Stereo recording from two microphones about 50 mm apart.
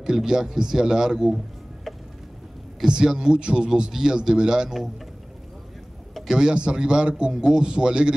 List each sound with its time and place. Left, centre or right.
0.0 s a man's voice: centre
2.8 s a man's voice: centre
6.3 s a man's voice: centre